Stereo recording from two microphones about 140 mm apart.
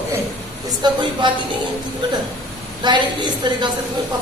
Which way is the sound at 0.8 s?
35° right (ahead or behind).